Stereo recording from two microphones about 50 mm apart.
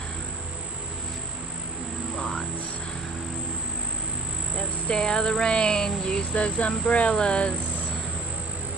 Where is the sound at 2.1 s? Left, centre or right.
Centre.